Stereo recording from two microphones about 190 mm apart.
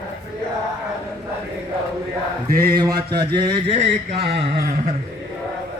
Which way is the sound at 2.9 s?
60° right (ahead or behind).